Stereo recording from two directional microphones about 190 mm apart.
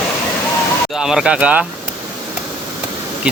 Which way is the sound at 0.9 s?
5° right (ahead or behind).